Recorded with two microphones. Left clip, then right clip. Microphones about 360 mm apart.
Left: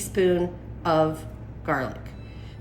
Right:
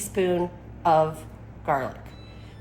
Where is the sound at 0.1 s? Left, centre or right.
Centre.